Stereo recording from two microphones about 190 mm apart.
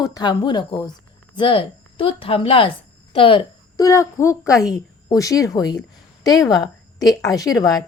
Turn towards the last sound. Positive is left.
turn(degrees=20)  # may be behind; listen again after turning